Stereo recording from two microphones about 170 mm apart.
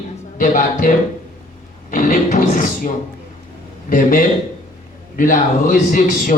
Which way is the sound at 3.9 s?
50° left (ahead or behind).